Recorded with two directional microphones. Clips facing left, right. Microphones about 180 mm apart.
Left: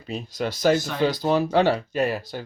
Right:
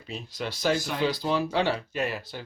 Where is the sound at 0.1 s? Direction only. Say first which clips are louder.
Left 6 dB; 45° left (ahead or behind).